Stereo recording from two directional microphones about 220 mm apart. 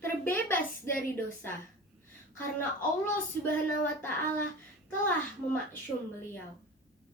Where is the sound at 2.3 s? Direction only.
10° left (ahead or behind).